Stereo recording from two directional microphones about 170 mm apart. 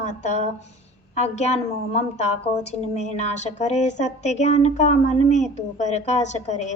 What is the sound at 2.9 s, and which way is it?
A woman's voice, 40° left (ahead or behind).